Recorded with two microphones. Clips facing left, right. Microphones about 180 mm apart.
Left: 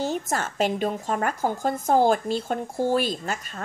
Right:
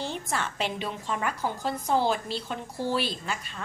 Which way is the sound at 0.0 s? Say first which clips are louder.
Left 5 dB; 45° left (ahead or behind).